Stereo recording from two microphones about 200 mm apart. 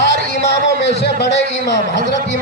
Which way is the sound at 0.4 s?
55° left (ahead or behind).